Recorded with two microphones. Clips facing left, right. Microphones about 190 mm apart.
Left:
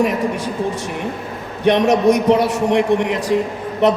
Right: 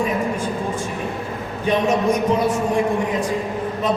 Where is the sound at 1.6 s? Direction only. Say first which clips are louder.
Left 5 dB; 80° left.